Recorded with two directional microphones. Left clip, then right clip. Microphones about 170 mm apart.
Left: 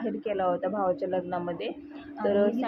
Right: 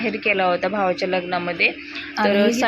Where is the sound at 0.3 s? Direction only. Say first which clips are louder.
Right 9 dB; 20° right (ahead or behind).